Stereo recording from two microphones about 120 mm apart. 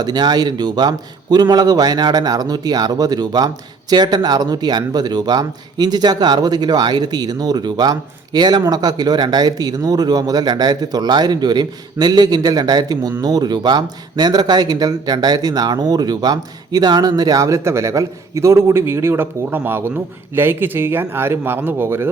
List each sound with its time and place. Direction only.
0.0 s speech: 35° right (ahead or behind); by 22.1 s 20° right (ahead or behind)